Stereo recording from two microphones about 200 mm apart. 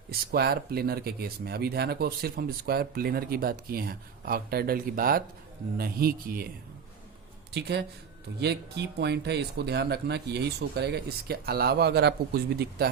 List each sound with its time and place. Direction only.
0.1 s speech: 50° right (ahead or behind)
7.5 s speech: 55° right (ahead or behind)